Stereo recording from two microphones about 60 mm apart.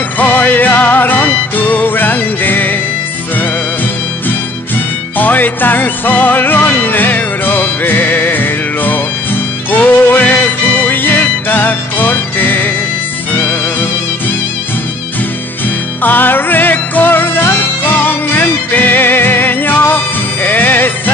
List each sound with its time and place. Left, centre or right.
0.2 s music: left
5.2 s music: left
16.0 s music: left